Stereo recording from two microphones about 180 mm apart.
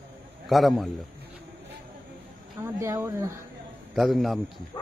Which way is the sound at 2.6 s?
15° right (ahead or behind).